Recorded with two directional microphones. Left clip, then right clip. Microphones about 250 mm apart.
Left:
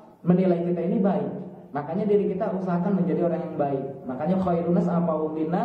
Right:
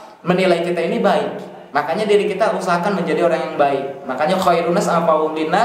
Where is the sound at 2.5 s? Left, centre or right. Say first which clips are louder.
Right 10 dB; centre.